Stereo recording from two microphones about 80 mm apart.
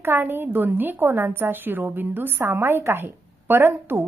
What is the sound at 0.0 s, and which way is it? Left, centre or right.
A woman's voice, right.